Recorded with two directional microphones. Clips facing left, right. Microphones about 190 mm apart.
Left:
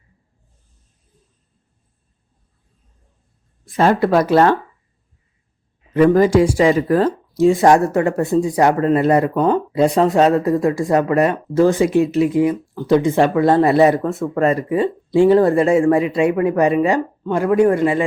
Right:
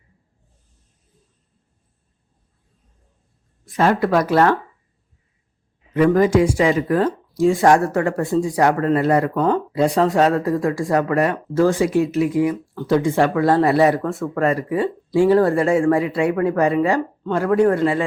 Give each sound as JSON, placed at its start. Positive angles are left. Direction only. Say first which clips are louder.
{"t": 3.7, "sound": "speech", "louder": "left 2 dB", "side_deg": 30}
{"t": 5.9, "sound": "speech", "louder": "left 3 dB", "side_deg": 35}
{"t": 7.3, "sound": "speech", "louder": "left 2 dB", "side_deg": 20}